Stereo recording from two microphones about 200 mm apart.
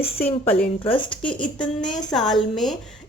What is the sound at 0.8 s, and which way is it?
Speech, 25° left (ahead or behind).